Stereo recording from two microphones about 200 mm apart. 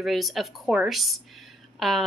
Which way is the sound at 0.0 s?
Centre (ahead or behind).